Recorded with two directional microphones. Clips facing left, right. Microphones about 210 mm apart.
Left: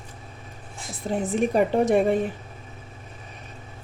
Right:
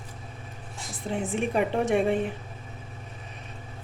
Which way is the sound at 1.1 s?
40° left (ahead or behind).